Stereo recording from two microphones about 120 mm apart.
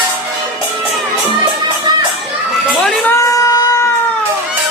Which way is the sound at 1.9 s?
35° right (ahead or behind).